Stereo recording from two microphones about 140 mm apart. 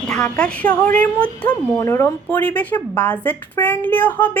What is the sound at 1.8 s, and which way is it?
Speech, 20° left (ahead or behind).